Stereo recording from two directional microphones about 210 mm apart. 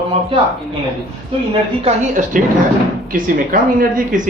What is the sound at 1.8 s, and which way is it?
A woman's voice, 35° right (ahead or behind).